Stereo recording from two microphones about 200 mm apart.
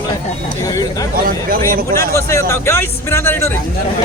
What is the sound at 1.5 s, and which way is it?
Speech, 45° right (ahead or behind).